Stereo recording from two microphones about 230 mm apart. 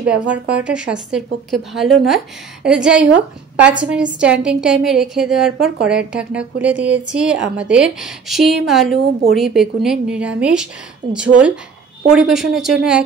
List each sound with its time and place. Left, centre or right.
0.7 s a woman's voice: centre